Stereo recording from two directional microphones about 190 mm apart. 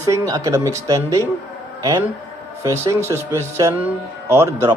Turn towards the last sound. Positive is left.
turn(degrees=-15)  # may be behind; listen again after turning